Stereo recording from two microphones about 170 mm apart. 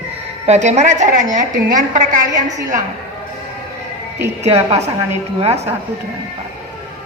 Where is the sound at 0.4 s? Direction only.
40° right (ahead or behind).